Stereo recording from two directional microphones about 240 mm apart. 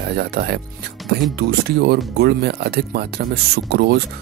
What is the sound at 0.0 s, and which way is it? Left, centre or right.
Speech, right.